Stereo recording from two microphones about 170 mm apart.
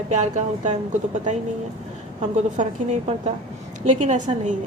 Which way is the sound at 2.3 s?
45° right (ahead or behind).